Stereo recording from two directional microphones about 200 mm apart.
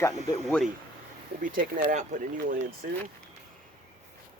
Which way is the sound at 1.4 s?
40° right (ahead or behind).